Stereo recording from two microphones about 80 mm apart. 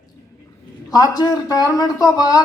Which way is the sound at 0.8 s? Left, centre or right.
Left.